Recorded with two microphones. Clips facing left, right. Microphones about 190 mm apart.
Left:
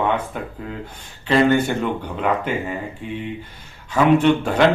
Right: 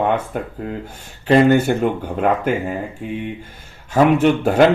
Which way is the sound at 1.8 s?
50° right (ahead or behind).